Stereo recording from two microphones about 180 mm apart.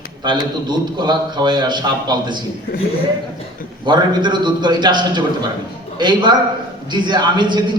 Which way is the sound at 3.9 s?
25° right (ahead or behind).